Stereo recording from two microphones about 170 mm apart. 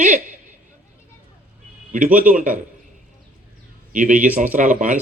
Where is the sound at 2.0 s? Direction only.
10° right (ahead or behind).